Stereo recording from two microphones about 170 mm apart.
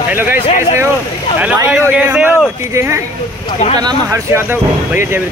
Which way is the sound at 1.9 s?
10° right (ahead or behind).